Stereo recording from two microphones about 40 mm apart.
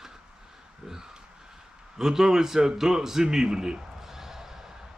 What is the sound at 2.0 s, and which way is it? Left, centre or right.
A man's voice, centre.